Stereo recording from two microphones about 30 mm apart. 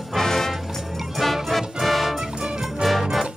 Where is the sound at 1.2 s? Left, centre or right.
Centre.